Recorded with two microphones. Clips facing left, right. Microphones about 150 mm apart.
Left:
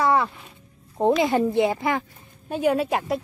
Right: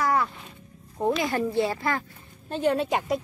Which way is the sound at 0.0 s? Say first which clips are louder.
Left 4 dB; 25° left (ahead or behind).